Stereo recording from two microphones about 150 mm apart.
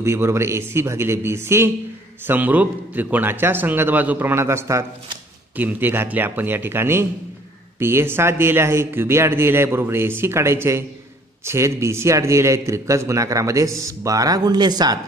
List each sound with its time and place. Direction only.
0.0 s a man's voice: 15° right (ahead or behind)